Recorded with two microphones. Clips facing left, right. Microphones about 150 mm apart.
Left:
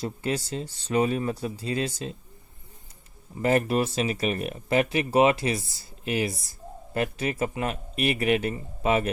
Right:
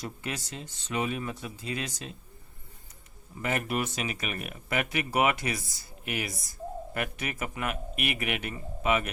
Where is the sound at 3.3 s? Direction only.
35° left (ahead or behind).